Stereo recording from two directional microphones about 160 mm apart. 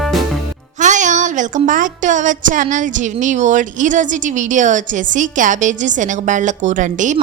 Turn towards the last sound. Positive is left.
turn(degrees=-50)  # may be behind; listen again after turning